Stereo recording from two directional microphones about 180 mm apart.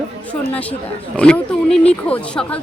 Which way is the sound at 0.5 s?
5° left (ahead or behind).